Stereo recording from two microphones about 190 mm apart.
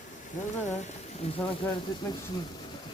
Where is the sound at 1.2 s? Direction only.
30° left (ahead or behind).